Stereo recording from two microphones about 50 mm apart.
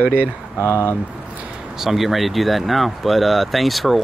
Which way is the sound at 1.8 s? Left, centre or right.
Centre.